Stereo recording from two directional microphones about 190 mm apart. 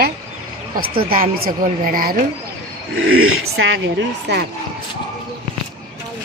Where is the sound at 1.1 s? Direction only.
50° right (ahead or behind).